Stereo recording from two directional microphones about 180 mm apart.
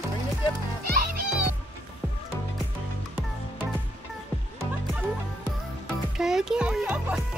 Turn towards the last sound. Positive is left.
turn(degrees=-5)  # may be behind; listen again after turning